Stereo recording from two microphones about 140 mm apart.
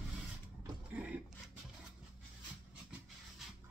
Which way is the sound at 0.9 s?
10° right (ahead or behind).